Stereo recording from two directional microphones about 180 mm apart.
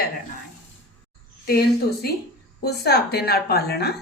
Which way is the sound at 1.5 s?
60° left (ahead or behind).